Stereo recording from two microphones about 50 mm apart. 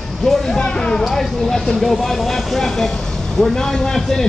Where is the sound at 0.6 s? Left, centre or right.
Centre.